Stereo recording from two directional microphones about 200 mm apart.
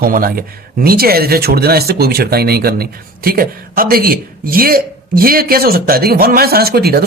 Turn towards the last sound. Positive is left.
turn(degrees=-50)  # may be behind; listen again after turning